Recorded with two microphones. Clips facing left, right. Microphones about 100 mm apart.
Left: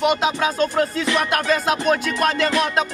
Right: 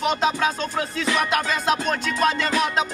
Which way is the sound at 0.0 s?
5° left (ahead or behind).